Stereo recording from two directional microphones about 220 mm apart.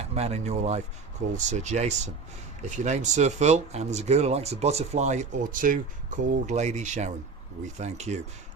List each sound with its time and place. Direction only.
0.1 s speech: 30° right (ahead or behind)